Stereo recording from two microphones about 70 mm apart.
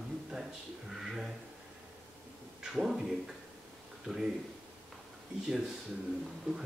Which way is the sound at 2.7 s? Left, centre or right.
Centre.